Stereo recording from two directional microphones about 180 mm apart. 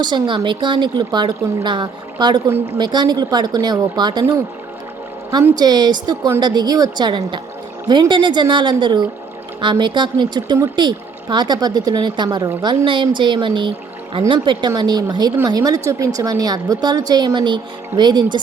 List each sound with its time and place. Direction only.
0.0 s speech: 25° right (ahead or behind)